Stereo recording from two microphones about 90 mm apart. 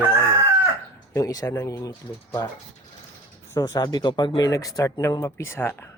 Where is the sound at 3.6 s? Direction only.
45° left (ahead or behind); by 5.9 s 30° left (ahead or behind).